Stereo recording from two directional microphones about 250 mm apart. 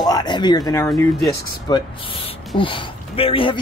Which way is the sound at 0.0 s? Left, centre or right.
Centre.